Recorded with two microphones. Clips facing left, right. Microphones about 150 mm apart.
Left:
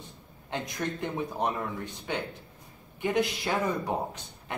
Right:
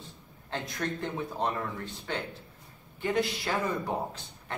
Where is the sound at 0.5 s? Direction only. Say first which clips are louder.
Left 1 dB; 15° left (ahead or behind).